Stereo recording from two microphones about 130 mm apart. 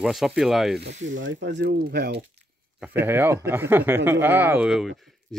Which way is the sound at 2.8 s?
15° right (ahead or behind).